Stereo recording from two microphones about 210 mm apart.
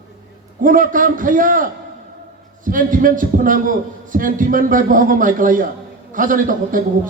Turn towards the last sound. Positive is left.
turn(degrees=-40)  # may be behind; listen again after turning